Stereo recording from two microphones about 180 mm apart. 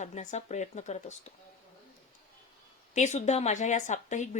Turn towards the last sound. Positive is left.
turn(degrees=40)  # may be behind; listen again after turning